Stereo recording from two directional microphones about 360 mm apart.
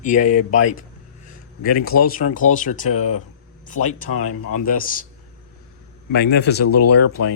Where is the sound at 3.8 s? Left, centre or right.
Left.